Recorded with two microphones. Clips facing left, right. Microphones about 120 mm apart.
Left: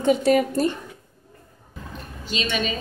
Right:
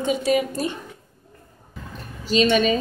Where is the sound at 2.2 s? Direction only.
40° right (ahead or behind).